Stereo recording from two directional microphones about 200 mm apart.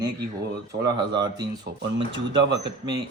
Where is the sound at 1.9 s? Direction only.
60° right (ahead or behind).